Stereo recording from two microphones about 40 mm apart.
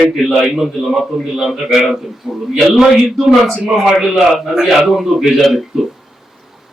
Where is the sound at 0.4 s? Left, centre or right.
Centre.